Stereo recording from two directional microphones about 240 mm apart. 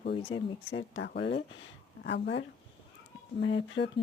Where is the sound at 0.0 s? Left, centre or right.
Left.